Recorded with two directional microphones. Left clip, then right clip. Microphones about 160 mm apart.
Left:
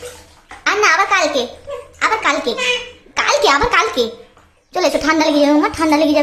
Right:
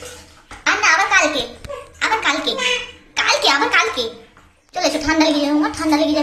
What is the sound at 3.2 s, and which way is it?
A woman's voice, 35° left (ahead or behind).